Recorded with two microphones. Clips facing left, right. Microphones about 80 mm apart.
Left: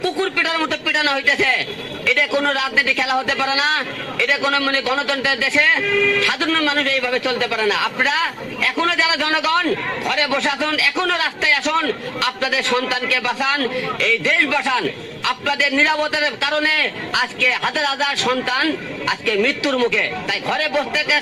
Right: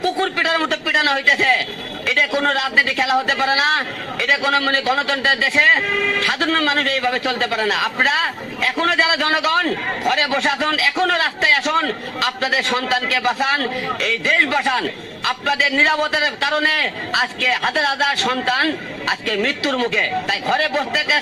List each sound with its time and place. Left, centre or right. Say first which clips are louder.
0.0 s a man's voice: right 1 dB; right
16.4 s a man's voice: right 1 dB; right
16.6 s a man's voice: right 1 dB; right